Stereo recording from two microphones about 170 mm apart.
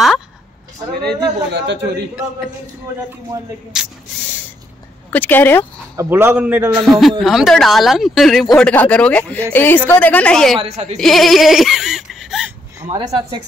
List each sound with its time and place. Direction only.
1.0 s a man's voice: 80° right
3.7 s speech: 5° right (ahead or behind)
5.1 s speech: 10° left (ahead or behind)
5.9 s a man's voice: 15° right (ahead or behind); by 10.6 s 5° left (ahead or behind)
10.6 s speech: 40° right (ahead or behind)
11.0 s speech: centre (ahead or behind)
12.9 s speech: 25° right (ahead or behind)